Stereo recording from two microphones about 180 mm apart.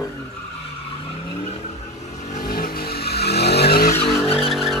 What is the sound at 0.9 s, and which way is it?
Vehicle, 30° left (ahead or behind).